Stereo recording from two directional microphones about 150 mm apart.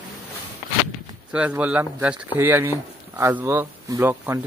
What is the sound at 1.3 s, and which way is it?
Speech, 10° right (ahead or behind).